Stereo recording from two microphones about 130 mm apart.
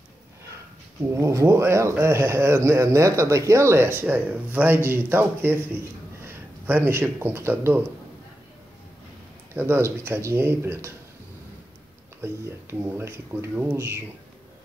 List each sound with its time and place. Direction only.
1.1 s speech: 20° right (ahead or behind)
9.5 s speech: 20° right (ahead or behind)
12.2 s speech: 20° right (ahead or behind)